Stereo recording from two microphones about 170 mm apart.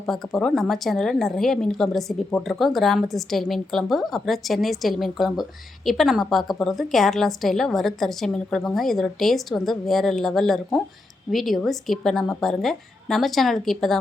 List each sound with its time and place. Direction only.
0.0 s a woman's voice: centre (ahead or behind)